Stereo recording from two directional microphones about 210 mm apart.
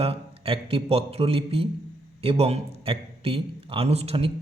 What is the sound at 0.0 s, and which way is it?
A man's voice, 25° right (ahead or behind).